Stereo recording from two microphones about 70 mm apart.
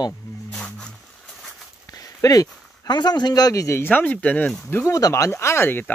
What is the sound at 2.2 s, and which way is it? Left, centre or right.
Speech, left.